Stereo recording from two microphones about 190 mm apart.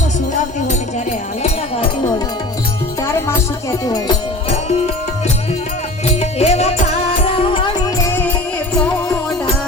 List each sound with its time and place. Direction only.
1.4 s a sound: 35° left (ahead or behind)
3.1 s music: 15° left (ahead or behind)
6.1 s music: 35° left (ahead or behind)
8.0 s music: 10° left (ahead or behind)